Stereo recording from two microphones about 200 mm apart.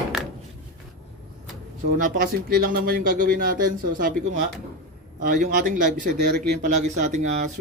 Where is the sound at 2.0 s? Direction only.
45° right (ahead or behind).